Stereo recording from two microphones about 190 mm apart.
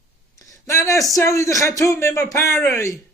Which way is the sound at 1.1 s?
15° left (ahead or behind).